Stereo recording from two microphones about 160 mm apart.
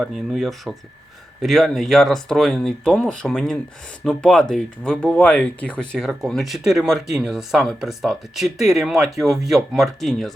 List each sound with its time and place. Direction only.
0.0 s speech: centre (ahead or behind)